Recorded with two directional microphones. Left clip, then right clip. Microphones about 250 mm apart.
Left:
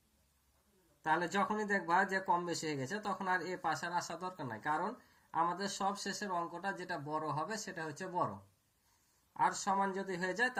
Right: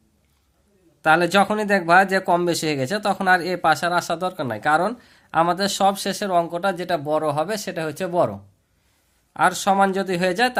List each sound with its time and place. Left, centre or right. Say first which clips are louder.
1.0 s speech: right 17 dB; right
9.3 s speech: right 15 dB; right